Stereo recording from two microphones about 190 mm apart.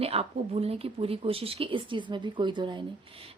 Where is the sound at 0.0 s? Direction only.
30° right (ahead or behind).